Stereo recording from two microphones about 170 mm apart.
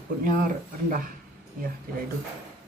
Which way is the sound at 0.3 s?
55° right (ahead or behind).